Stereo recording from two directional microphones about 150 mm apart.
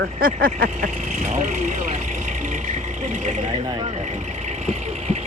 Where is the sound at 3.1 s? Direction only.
55° right (ahead or behind).